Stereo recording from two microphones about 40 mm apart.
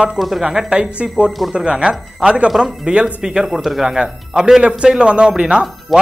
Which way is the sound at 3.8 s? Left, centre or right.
Centre.